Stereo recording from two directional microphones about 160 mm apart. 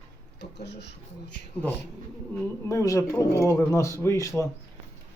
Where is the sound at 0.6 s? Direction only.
90° left.